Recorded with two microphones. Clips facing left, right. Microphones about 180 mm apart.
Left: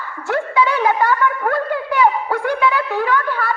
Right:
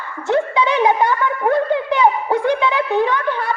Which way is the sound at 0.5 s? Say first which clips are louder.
Left 3 dB; 20° right (ahead or behind).